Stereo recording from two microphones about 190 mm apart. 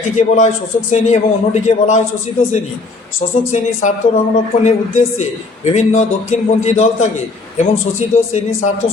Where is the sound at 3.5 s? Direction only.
40° left (ahead or behind).